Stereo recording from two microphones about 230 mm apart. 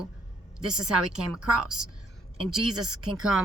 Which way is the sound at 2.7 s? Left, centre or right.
Right.